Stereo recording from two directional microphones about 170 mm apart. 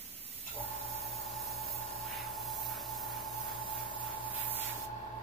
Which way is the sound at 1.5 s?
Centre (ahead or behind).